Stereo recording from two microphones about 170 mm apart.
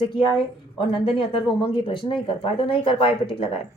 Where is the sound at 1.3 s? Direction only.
30° left (ahead or behind).